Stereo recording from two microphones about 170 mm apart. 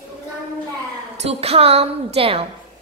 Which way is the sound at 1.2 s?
35° right (ahead or behind).